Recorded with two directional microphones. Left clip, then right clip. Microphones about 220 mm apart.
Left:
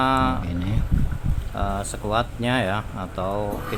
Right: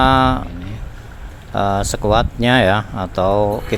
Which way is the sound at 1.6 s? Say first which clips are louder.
Right 10 dB; 30° right (ahead or behind).